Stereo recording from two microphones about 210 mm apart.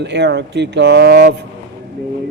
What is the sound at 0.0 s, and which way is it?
A man's voice, 55° right (ahead or behind).